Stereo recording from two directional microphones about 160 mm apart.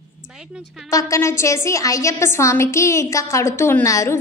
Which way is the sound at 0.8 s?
20° left (ahead or behind).